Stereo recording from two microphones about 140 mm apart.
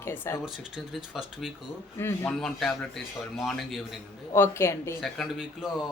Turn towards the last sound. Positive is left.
turn(degrees=-5)  # may be behind; listen again after turning